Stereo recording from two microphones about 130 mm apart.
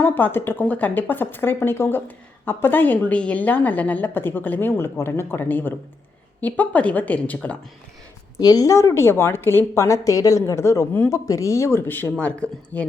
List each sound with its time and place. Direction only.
0.0 s a woman's voice: 15° left (ahead or behind)
8.4 s a woman's voice: 30° left (ahead or behind); by 12.8 s 10° left (ahead or behind)